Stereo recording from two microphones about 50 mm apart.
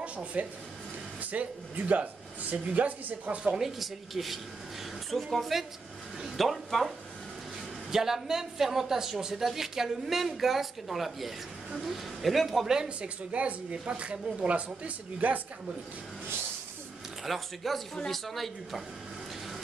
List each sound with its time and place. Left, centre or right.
0.0 s speech: right
3.5 s speech: centre
7.9 s a woman's voice: centre
12.6 s speech: centre; by 15.4 s right
17.2 s speech: centre